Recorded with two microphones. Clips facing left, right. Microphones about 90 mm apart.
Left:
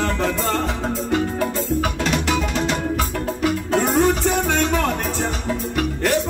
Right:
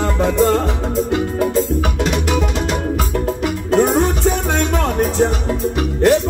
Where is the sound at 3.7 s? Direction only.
5° right (ahead or behind).